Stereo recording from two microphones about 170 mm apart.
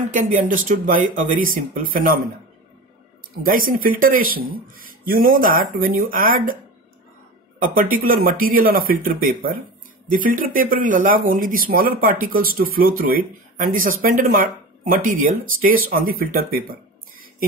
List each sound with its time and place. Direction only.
0.1 s speech: 50° right (ahead or behind)
3.4 s speech: 55° right (ahead or behind)
7.5 s speech: 55° right (ahead or behind)